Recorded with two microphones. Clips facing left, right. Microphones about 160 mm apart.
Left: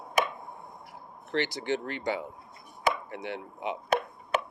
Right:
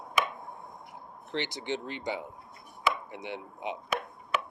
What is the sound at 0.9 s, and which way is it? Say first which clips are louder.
Speech: left 4 dB; 20° right (ahead or behind).